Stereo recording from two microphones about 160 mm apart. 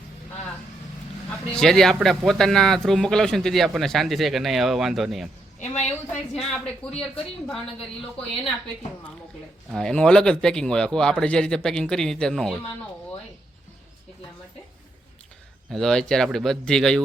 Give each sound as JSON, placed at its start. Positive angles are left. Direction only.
{"t": 1.3, "sound": "speech", "side_deg": 5}
{"t": 5.5, "sound": "a woman's voice", "side_deg": 45}
{"t": 6.5, "sound": "speech", "side_deg": 5}
{"t": 9.7, "sound": "speech", "side_deg": 5}
{"t": 15.7, "sound": "speech", "side_deg": 5}